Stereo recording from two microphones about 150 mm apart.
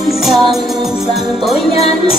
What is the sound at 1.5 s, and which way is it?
Music, 40° left (ahead or behind).